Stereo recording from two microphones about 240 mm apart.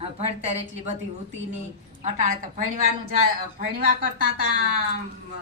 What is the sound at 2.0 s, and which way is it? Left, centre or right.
A woman's voice, right.